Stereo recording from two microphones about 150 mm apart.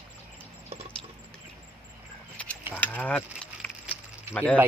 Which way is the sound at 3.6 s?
10° left (ahead or behind).